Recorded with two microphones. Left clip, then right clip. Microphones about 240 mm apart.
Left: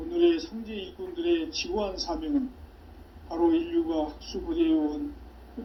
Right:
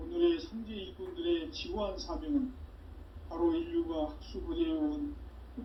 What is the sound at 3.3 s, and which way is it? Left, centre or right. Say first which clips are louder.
Speech: left 7 dB; left.